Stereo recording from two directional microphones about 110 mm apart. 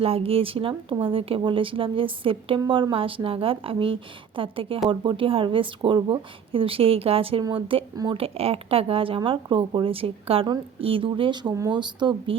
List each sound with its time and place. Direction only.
0.0 s a woman's voice: 60° right (ahead or behind)